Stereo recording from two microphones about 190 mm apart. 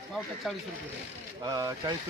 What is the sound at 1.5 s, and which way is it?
Speech, 20° right (ahead or behind).